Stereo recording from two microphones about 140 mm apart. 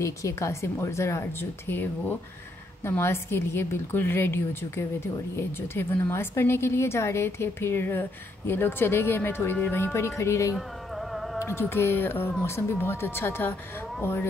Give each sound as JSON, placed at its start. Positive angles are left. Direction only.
{"t": 0.0, "sound": "a woman's voice", "side_deg": 20}